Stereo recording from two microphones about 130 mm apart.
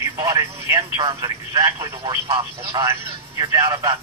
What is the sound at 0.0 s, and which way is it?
Telephone, 25° right (ahead or behind).